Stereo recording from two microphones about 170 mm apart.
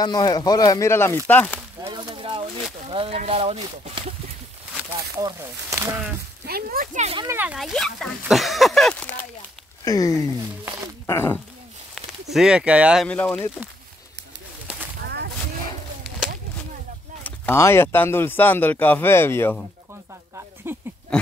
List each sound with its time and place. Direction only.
0.0 s speech: 25° left (ahead or behind)
1.9 s a sound: 30° right (ahead or behind)
2.9 s speech: 35° right (ahead or behind)
4.9 s speech: 20° right (ahead or behind)
6.4 s speech: 60° right (ahead or behind); by 7.2 s 45° right (ahead or behind)
7.3 s speech: 5° right (ahead or behind)
9.8 s speech: 20° left (ahead or behind)
10.6 s wild animals: 20° right (ahead or behind)
11.1 s speech: 15° left (ahead or behind)
11.9 s speech: centre (ahead or behind)
13.0 s speech: 10° left (ahead or behind)
17.2 s speech: 15° left (ahead or behind)
20.7 s speech: 15° right (ahead or behind)
21.1 s a sound: 5° left (ahead or behind)